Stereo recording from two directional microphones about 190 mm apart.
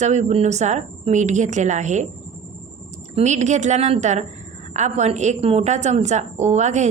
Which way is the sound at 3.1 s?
35° right (ahead or behind).